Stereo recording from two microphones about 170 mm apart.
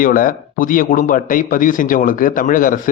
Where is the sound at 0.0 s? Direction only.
55° left (ahead or behind).